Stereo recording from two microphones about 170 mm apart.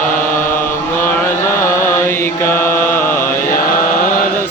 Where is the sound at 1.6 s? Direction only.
15° left (ahead or behind).